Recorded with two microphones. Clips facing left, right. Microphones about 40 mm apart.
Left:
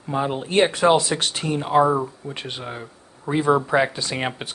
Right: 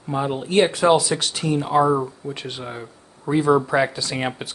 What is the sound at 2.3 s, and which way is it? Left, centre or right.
Speech, left.